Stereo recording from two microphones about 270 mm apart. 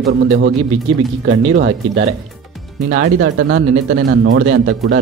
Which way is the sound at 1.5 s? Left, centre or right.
Right.